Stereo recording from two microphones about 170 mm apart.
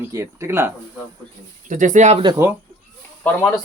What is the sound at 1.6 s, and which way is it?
Speech, 50° right (ahead or behind).